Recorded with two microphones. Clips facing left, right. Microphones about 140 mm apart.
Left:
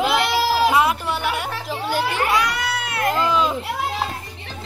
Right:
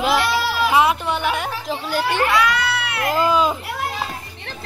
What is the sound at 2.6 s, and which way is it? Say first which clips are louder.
Baby cry: right 1 dB; 45° left (ahead or behind).